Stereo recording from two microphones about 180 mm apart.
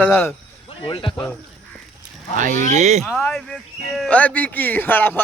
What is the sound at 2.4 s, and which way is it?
Speech, 45° right (ahead or behind).